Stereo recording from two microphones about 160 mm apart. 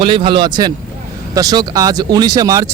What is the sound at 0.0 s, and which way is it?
Speech, 35° right (ahead or behind).